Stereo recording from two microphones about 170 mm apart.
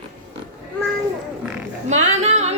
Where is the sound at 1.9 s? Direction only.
40° right (ahead or behind).